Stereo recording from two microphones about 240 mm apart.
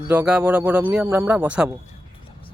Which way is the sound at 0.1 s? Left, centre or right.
Centre.